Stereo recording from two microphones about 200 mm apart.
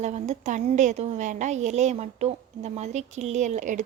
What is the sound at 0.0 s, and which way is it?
A woman's voice, 35° right (ahead or behind).